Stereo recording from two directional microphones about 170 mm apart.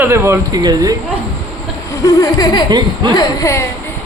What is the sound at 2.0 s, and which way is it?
Speech, 20° left (ahead or behind).